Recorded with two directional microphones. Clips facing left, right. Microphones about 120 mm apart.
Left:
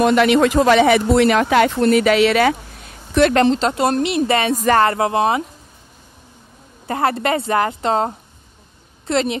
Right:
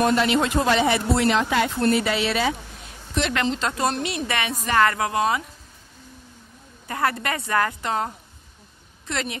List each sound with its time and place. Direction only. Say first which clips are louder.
0.0 s speech: left 6 dB; 80° left
3.2 s speech: left 10 dB; 55° left (ahead or behind)
3.5 s a woman's voice: left 7 dB; 25° left (ahead or behind)
6.9 s a woman's voice: left 6 dB; 30° left (ahead or behind)